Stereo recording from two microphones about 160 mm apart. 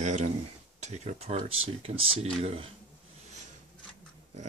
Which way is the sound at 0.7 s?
45° right (ahead or behind).